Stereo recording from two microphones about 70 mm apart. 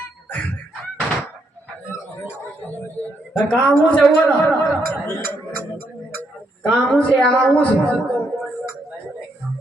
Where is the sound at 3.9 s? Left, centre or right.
Centre.